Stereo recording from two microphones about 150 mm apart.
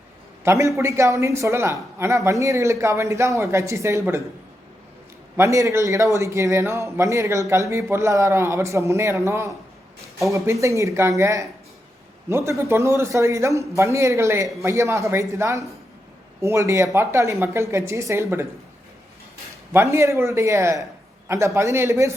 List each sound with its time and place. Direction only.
0.4 s a man's voice: 20° right (ahead or behind)
5.4 s a man's voice: 20° right (ahead or behind)
19.7 s a man's voice: 20° right (ahead or behind)